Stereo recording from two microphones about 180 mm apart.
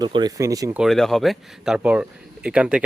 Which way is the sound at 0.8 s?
Centre (ahead or behind).